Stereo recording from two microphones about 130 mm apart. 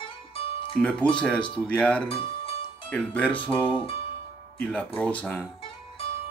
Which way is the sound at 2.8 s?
10° left (ahead or behind).